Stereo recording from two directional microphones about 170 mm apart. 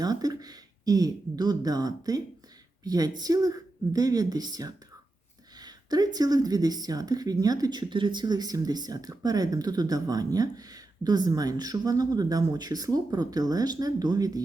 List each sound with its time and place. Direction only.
0.0 s speech: 20° right (ahead or behind)